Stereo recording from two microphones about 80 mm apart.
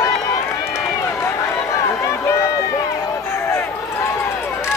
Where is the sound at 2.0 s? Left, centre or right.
Left.